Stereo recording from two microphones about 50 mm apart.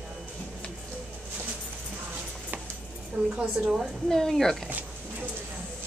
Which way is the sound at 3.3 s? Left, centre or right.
Right.